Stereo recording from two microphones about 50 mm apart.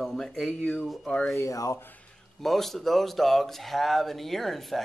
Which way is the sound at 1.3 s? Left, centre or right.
Left.